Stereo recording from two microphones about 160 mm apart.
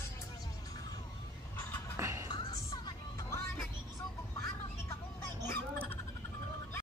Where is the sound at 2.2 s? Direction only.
30° left (ahead or behind).